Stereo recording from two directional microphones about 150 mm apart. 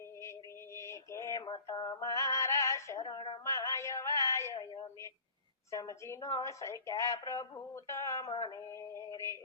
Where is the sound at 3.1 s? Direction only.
30° left (ahead or behind).